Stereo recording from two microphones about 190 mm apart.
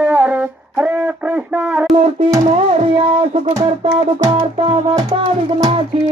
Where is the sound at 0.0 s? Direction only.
5° right (ahead or behind).